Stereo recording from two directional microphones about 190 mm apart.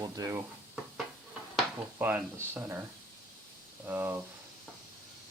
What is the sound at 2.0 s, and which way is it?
Speech, 10° right (ahead or behind).